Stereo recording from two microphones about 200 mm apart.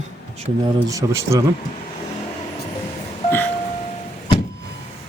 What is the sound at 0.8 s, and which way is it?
Speech, 15° right (ahead or behind).